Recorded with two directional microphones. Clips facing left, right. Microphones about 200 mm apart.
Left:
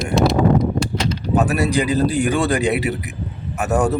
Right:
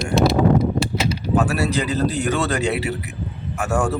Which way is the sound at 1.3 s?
20° left (ahead or behind).